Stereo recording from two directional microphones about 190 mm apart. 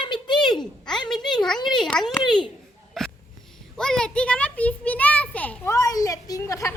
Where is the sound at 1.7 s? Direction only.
Centre (ahead or behind).